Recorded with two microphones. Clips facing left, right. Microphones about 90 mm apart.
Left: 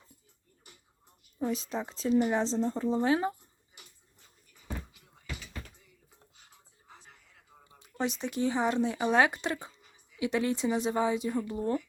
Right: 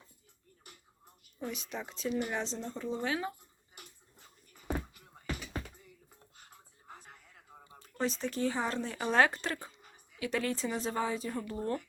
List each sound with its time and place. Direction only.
1.4 s speech: 30° left (ahead or behind)
3.8 s bathtub: 50° right (ahead or behind)
4.9 s a sound: 50° right (ahead or behind)
7.8 s speech: 15° left (ahead or behind)
9.8 s a sound: 50° right (ahead or behind)
10.2 s speech: 20° left (ahead or behind)